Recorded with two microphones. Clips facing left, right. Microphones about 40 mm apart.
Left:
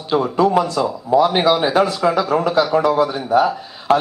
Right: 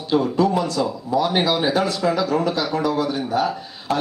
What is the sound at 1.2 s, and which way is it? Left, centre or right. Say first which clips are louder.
Speech: left 4 dB; centre.